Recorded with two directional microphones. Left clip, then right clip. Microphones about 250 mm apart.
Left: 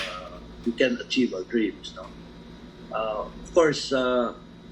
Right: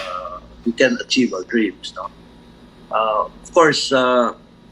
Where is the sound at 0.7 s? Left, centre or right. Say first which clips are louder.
Right 8 dB; right.